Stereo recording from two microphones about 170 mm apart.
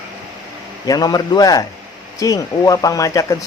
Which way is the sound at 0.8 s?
20° left (ahead or behind).